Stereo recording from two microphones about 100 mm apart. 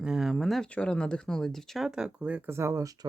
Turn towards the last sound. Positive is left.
turn(degrees=-30)  # may be behind; listen again after turning